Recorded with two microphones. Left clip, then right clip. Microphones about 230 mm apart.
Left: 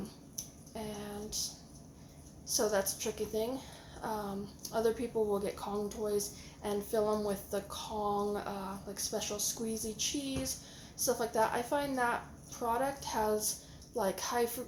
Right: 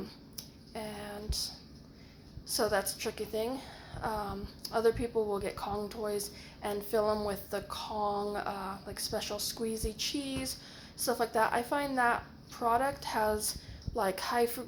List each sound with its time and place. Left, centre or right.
0.7 s music: centre
2.5 s speech: centre